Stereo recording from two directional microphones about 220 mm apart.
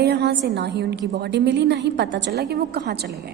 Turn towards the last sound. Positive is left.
turn(degrees=-45)  # may be behind; listen again after turning